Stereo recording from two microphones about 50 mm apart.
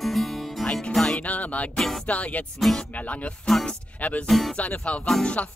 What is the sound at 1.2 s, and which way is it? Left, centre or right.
Music, left.